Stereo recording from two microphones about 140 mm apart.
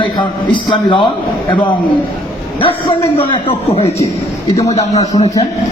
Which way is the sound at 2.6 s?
40° left (ahead or behind).